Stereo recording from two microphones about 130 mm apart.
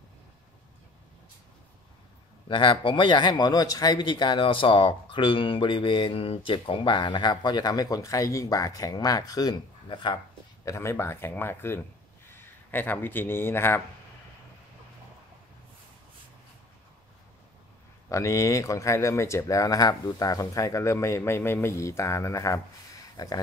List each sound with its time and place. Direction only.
2.4 s speech: 40° left (ahead or behind)
10.6 s speech: 25° left (ahead or behind)
18.1 s speech: 25° left (ahead or behind)